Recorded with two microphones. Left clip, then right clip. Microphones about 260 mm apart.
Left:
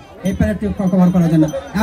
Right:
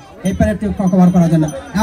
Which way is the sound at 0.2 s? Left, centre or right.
Right.